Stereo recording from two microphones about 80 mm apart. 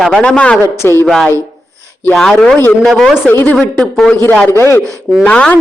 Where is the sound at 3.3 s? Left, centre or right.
Left.